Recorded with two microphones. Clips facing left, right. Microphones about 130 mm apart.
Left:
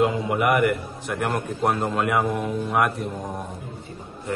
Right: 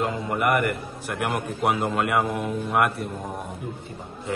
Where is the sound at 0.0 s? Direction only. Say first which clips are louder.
Left 3 dB; centre (ahead or behind).